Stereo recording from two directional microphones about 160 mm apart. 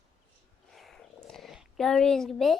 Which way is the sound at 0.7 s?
Centre (ahead or behind).